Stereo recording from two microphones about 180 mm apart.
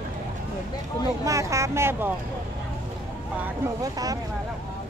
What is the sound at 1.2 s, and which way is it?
Speech, 15° right (ahead or behind).